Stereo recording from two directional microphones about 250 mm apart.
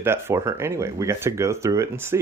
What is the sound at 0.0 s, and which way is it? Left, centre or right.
Speech, centre.